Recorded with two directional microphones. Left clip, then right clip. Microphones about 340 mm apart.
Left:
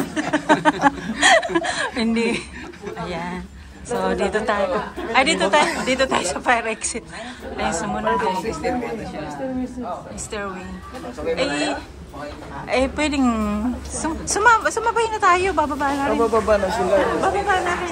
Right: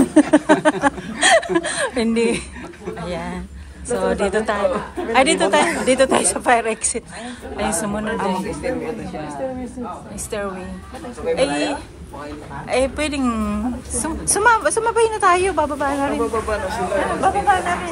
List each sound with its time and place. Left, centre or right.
0.0 s a sound: centre
3.9 s a woman's voice: centre
8.5 s a woman's voice: centre
11.3 s a woman's voice: centre
16.1 s speech: left
16.7 s a woman's voice: centre